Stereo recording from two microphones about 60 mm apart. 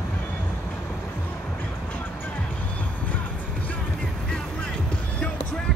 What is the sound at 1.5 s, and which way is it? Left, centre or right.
Music, left.